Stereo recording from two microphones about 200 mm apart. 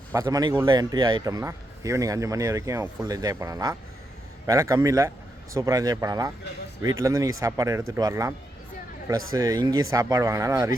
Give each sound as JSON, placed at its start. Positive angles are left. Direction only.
{"t": 0.1, "sound": "a man's voice", "side_deg": -15}